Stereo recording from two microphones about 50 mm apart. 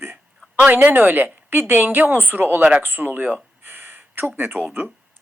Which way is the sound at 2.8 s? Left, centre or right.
Right.